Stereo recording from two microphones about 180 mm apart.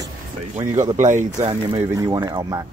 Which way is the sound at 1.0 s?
40° right (ahead or behind).